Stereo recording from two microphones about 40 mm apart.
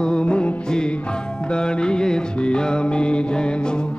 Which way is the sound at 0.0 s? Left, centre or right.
Left.